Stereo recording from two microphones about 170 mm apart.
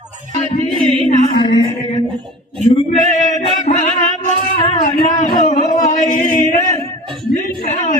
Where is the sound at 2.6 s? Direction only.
45° left (ahead or behind).